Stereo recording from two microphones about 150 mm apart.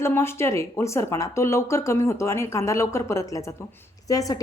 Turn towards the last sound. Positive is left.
turn(degrees=25)  # may be behind; listen again after turning